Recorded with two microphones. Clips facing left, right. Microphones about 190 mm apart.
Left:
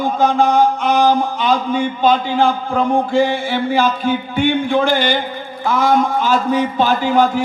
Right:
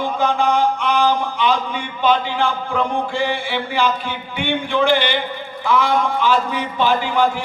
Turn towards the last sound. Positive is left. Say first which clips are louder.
# left 4 dB
turn(degrees=45)  # may be behind; listen again after turning